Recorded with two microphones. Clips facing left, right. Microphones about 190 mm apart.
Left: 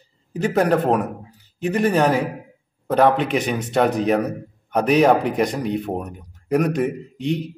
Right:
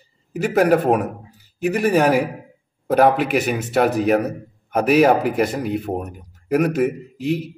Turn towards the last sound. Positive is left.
turn(degrees=-5)  # may be behind; listen again after turning